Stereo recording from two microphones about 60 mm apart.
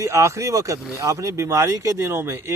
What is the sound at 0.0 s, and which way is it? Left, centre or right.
A man's voice, right.